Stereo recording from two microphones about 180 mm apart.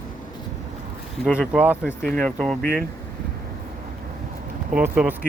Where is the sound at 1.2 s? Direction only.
5° right (ahead or behind).